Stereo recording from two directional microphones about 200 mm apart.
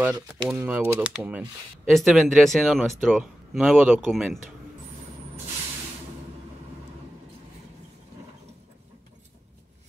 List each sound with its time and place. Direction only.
0.1 s speech: 10° right (ahead or behind)